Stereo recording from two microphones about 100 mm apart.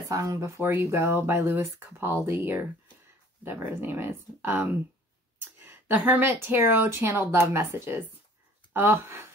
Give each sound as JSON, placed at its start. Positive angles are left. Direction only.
{"t": 0.1, "sound": "speech", "side_deg": -30}